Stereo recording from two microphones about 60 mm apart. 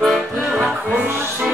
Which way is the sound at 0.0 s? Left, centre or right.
Centre.